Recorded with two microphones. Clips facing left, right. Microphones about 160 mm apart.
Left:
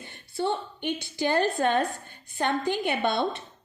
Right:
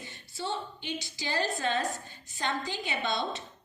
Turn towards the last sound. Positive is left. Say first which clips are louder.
# left 6 dB
turn(degrees=60)  # may be behind; listen again after turning